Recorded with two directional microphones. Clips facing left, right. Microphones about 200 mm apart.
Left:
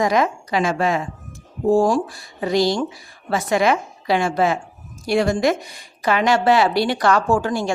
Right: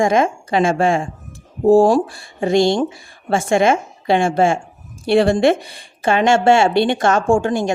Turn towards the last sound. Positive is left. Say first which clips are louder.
# right 4 dB
turn(degrees=-20)  # may be behind; listen again after turning